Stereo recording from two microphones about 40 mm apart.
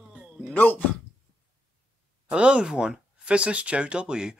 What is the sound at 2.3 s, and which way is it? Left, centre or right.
Speech, right.